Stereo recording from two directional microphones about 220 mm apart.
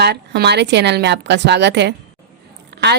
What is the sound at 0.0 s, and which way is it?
A woman's voice, 50° right (ahead or behind).